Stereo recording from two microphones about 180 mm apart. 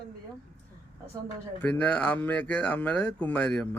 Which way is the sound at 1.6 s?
10° left (ahead or behind).